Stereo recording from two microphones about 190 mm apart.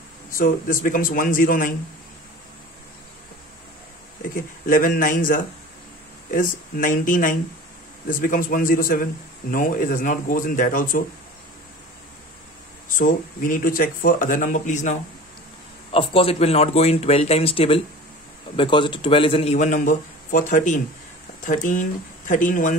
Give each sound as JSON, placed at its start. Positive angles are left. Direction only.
{"t": 0.3, "sound": "speech", "side_deg": 45}
{"t": 4.4, "sound": "speech", "side_deg": 45}
{"t": 12.9, "sound": "speech", "side_deg": 45}
{"t": 15.9, "sound": "a man's voice", "side_deg": 30}